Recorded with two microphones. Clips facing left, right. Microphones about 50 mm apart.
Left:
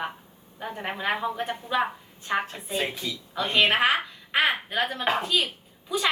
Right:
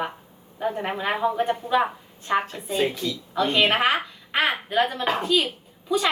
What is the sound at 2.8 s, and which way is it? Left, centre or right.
Speech, centre.